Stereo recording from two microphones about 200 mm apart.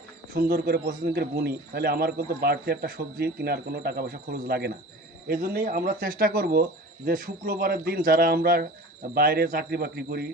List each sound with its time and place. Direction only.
0.3 s a man's voice: 50° right (ahead or behind)